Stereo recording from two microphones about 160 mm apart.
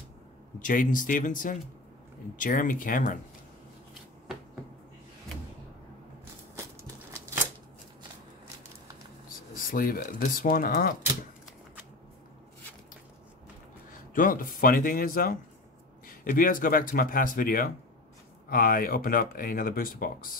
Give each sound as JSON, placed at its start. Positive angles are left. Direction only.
{"t": 0.6, "sound": "speech", "side_deg": 55}
{"t": 6.5, "sound": "a sound", "side_deg": -20}
{"t": 9.7, "sound": "speech", "side_deg": 65}
{"t": 14.1, "sound": "speech", "side_deg": 60}